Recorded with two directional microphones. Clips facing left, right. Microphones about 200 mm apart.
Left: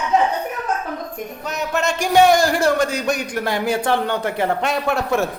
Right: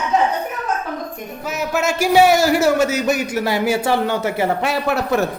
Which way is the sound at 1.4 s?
5° right (ahead or behind).